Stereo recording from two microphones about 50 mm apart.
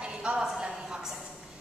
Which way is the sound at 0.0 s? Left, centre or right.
Centre.